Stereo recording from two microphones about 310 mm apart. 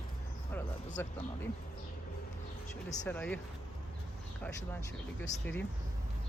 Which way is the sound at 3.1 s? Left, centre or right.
Centre.